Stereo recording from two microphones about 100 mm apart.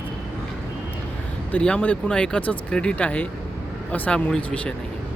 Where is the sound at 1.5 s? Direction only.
15° left (ahead or behind).